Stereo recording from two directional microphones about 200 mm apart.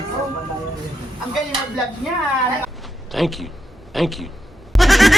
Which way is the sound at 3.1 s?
Centre (ahead or behind).